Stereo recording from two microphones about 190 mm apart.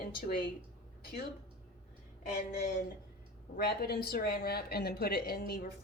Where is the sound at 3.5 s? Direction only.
55° left (ahead or behind).